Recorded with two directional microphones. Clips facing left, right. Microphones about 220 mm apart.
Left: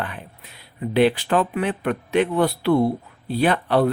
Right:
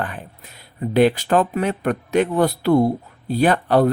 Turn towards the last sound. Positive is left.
turn(degrees=-45)  # may be behind; listen again after turning